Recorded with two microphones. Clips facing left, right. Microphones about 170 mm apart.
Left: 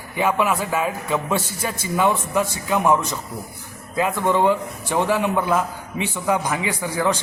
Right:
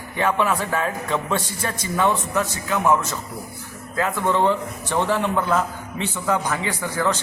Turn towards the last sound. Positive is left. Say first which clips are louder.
# left 1 dB
turn(degrees=15)  # may be behind; listen again after turning